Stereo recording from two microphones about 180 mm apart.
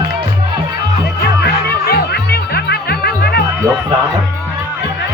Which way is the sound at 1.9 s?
60° left (ahead or behind).